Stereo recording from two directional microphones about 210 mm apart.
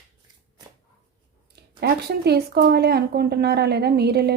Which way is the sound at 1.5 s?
50° right (ahead or behind).